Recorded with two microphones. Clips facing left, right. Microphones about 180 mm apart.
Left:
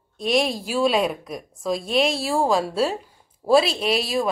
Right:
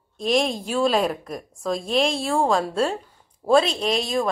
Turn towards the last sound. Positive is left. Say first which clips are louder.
# even
turn(degrees=5)  # may be behind; listen again after turning